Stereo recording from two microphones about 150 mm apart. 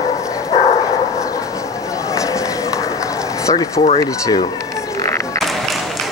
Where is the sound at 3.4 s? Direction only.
20° left (ahead or behind).